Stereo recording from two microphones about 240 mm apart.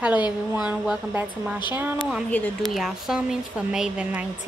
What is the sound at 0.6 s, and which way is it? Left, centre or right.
Speech, centre.